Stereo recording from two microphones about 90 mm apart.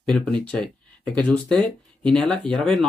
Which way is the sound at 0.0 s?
10° left (ahead or behind).